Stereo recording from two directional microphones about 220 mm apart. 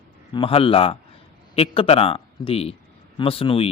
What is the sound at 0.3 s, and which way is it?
A man's voice, 25° left (ahead or behind).